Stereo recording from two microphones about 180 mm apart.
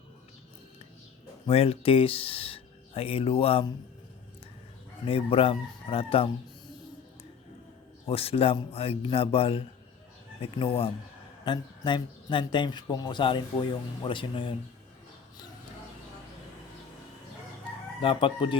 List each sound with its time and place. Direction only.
1.5 s speech: 35° left (ahead or behind)
5.0 s speech: 30° left (ahead or behind)
8.0 s speech: 30° left (ahead or behind)
18.0 s speech: 30° left (ahead or behind)